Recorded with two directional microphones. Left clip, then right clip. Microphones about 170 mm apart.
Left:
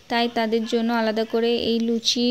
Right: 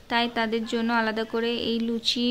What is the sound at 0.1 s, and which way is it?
A woman's voice, 15° left (ahead or behind).